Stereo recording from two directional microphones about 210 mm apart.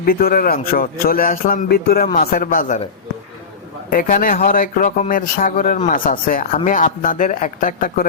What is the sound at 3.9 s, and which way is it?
A man's voice, 40° left (ahead or behind).